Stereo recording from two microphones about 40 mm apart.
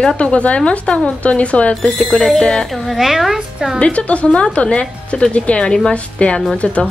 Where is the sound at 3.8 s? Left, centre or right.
Left.